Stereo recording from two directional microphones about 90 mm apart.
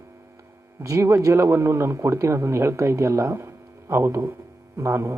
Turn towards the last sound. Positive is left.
turn(degrees=-30)  # may be behind; listen again after turning